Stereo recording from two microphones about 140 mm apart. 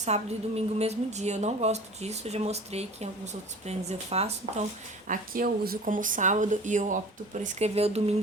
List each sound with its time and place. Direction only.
0.0 s a woman's voice: 50° right (ahead or behind)
5.0 s speech: 85° right; by 8.1 s 45° right (ahead or behind)